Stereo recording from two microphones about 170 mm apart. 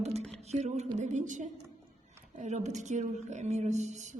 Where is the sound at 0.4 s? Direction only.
40° right (ahead or behind).